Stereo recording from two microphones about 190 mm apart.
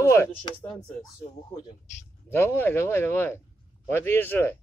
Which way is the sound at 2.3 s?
10° left (ahead or behind).